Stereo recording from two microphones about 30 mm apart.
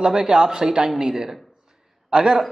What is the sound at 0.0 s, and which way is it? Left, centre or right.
A man's voice, right.